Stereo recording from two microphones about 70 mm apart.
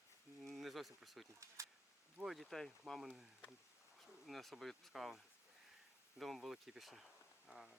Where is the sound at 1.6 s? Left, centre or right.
Right.